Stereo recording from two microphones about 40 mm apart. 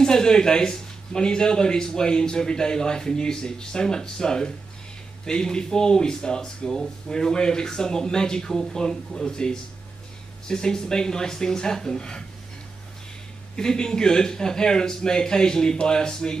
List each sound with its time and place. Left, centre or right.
0.0 s speech: centre
13.6 s speech: centre